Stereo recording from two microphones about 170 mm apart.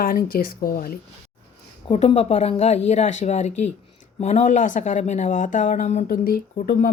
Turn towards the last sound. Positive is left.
turn(degrees=60)  # may be behind; listen again after turning